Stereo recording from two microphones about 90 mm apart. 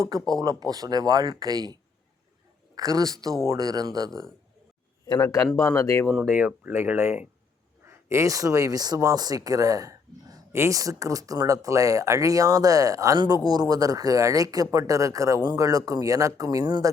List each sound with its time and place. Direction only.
0.0 s speech: 45° right (ahead or behind)
5.0 s speech: 50° left (ahead or behind)
5.5 s speech: 30° left (ahead or behind)
6.1 s speech: 5° left (ahead or behind)
6.3 s speech: 20° right (ahead or behind); by 16.9 s 45° right (ahead or behind)